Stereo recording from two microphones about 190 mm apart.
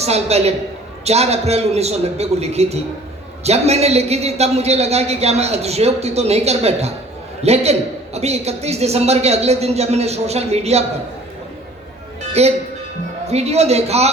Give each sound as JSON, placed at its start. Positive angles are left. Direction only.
{"t": 0.0, "sound": "a man's voice", "side_deg": -35}
{"t": 12.3, "sound": "a man's voice", "side_deg": -35}